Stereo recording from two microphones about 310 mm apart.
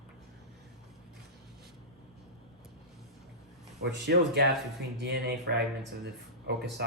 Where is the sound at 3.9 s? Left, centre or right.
Right.